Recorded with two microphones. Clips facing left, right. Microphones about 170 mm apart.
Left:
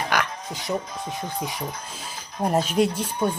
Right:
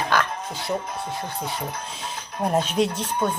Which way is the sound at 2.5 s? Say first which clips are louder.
Left 1 dB; 10° left (ahead or behind).